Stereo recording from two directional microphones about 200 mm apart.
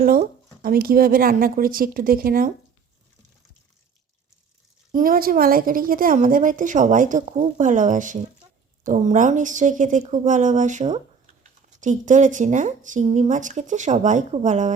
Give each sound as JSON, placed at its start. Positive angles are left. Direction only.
{"t": 0.6, "sound": "a woman's voice", "side_deg": -45}
{"t": 4.9, "sound": "a woman's voice", "side_deg": -45}